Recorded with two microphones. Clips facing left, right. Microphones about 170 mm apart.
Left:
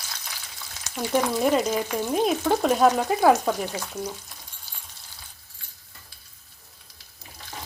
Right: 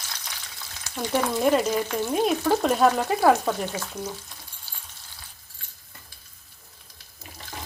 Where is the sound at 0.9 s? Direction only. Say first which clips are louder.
Left 1 dB; 5° left (ahead or behind).